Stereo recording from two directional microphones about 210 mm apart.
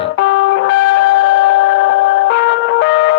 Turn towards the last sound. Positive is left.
turn(degrees=55)  # may be behind; listen again after turning